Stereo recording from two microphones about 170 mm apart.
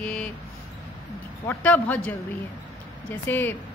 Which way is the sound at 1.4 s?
15° left (ahead or behind).